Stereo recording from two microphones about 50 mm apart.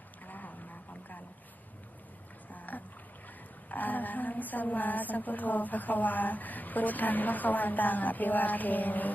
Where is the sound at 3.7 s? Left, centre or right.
Left.